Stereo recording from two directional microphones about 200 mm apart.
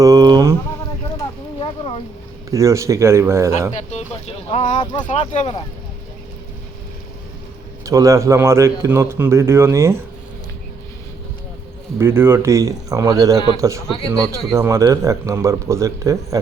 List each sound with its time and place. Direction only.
0.0 s a sound: 20° right (ahead or behind)
1.5 s a sound: 25° left (ahead or behind)
2.5 s a man's voice: 15° right (ahead or behind)
4.4 s speech: 35° left (ahead or behind)
4.8 s speech: 20° left (ahead or behind)
5.0 s speech: 35° left (ahead or behind)
7.9 s a man's voice: 15° right (ahead or behind)
11.9 s a man's voice: 10° right (ahead or behind)